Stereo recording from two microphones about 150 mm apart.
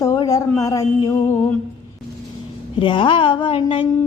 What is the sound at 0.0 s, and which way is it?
Speech, 20° left (ahead or behind).